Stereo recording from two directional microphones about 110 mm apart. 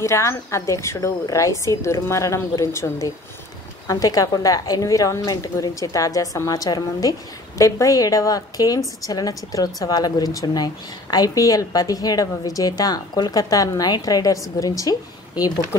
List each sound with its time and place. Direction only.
0.0 s a woman's voice: 25° left (ahead or behind)